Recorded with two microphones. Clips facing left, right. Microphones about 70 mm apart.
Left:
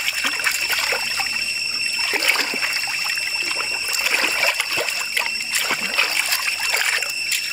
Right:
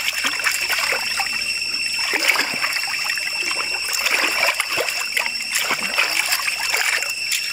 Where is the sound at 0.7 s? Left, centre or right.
Centre.